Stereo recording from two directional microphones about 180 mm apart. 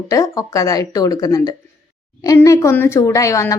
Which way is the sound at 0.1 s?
20° left (ahead or behind).